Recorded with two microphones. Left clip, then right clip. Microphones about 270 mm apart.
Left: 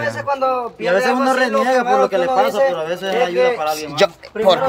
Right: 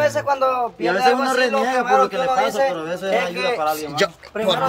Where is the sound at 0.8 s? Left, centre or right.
Left.